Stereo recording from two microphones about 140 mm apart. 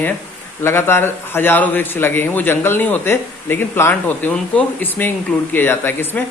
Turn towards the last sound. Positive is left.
turn(degrees=15)  # may be behind; listen again after turning